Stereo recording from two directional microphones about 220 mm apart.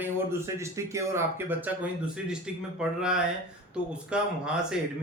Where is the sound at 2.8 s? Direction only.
5° right (ahead or behind).